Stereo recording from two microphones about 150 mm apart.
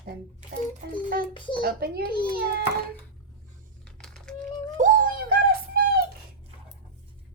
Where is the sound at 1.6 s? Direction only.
90° right.